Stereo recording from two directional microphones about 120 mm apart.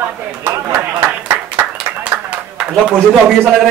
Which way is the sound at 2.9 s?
5° left (ahead or behind).